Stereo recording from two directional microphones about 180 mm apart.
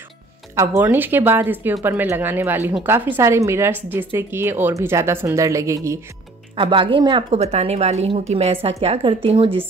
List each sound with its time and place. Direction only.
0.6 s speech: 15° right (ahead or behind)
6.5 s speech: 30° right (ahead or behind)
7.2 s a woman's voice: 35° right (ahead or behind)